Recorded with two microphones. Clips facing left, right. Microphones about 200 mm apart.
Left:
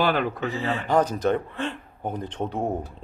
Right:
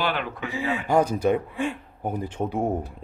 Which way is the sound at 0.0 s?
40° left (ahead or behind).